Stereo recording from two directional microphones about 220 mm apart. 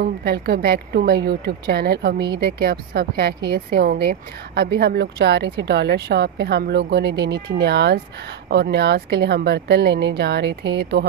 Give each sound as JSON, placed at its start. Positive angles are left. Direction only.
{"t": 0.0, "sound": "a woman's voice", "side_deg": -45}